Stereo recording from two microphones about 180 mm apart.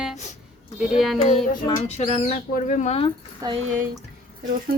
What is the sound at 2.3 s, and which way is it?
Speech, 50° left (ahead or behind).